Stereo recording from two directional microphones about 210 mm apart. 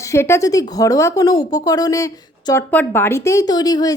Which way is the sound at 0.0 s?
15° left (ahead or behind).